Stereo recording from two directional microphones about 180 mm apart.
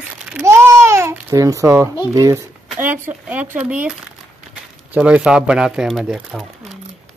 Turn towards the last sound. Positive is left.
turn(degrees=0)  # may be behind; listen again after turning